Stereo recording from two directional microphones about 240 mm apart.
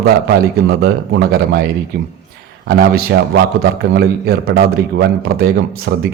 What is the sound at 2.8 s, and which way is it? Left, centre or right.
A man's voice, right.